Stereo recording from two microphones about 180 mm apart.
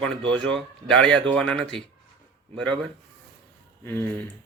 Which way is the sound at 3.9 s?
15° left (ahead or behind).